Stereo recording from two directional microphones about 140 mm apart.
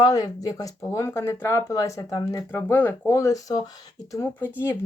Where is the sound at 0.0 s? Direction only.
25° left (ahead or behind).